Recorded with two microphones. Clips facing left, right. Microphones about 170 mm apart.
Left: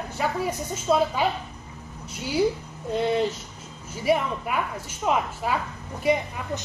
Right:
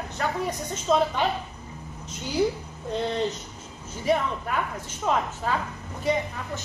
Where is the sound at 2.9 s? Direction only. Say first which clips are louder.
Left 3 dB; 10° left (ahead or behind).